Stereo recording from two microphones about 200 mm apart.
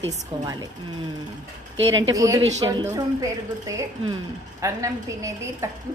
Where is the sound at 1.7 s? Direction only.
70° right (ahead or behind).